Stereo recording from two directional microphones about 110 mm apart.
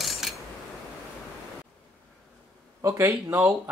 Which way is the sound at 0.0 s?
Centre (ahead or behind).